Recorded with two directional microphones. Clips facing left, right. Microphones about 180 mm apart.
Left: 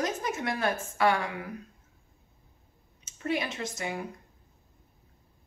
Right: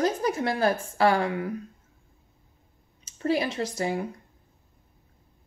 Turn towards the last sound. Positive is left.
turn(degrees=-35)  # may be behind; listen again after turning